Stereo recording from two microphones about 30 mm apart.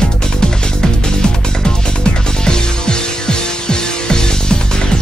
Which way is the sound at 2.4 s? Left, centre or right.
Left.